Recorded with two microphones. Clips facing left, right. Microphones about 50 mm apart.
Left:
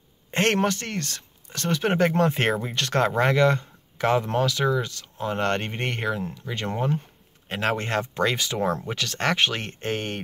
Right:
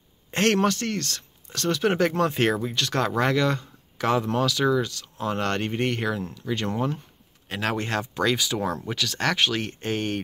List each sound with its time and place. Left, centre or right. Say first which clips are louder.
0.3 s speech: right 1 dB; left